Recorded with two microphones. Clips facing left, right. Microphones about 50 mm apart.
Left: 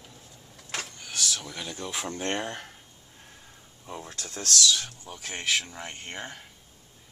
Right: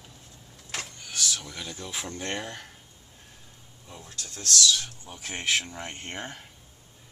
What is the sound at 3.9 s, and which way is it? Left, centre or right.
Speech, left.